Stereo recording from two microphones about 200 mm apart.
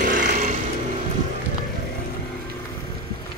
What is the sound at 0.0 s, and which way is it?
Vehicle, 40° right (ahead or behind).